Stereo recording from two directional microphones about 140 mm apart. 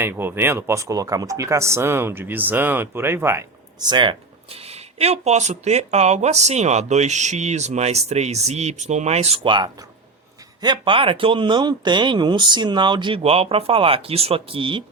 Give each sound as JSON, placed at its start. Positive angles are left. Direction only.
{"t": 0.0, "sound": "speech", "side_deg": -15}
{"t": 3.8, "sound": "speech", "side_deg": -35}
{"t": 4.7, "sound": "speech", "side_deg": -50}
{"t": 10.6, "sound": "speech", "side_deg": -35}